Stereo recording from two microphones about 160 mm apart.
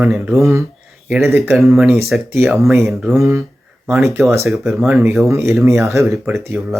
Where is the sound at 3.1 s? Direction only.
20° right (ahead or behind).